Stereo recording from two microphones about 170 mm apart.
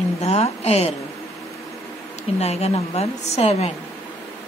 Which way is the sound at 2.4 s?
40° left (ahead or behind).